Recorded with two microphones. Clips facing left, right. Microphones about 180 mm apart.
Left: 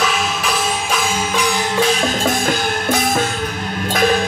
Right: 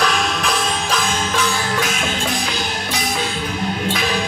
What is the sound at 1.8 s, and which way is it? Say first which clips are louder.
Music: left 6 dB; 35° left (ahead or behind).